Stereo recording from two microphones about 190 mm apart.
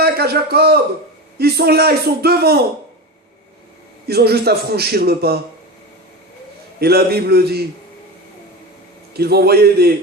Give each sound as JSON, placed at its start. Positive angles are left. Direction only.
{"t": 0.0, "sound": "a man's voice", "side_deg": -55}
{"t": 4.0, "sound": "a man's voice", "side_deg": -55}
{"t": 6.7, "sound": "a man's voice", "side_deg": -55}
{"t": 9.1, "sound": "a man's voice", "side_deg": -55}